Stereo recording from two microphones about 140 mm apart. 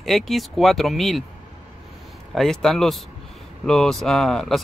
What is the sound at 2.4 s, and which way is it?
Speech, centre (ahead or behind).